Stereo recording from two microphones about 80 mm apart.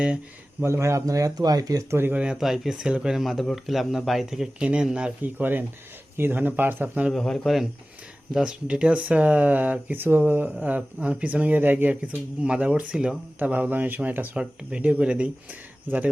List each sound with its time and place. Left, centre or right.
0.6 s speech: right
1.9 s speech: right
2.1 s speech: centre
5.4 s speech: right
7.1 s speech: centre
13.5 s speech: right